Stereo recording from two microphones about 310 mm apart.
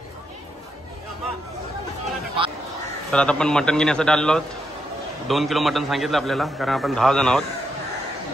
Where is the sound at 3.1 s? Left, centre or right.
Centre.